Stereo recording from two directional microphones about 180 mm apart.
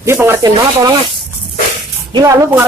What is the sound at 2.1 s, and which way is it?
Speech, 20° right (ahead or behind).